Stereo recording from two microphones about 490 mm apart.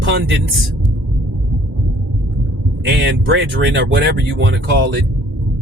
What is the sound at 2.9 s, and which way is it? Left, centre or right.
Speech, right.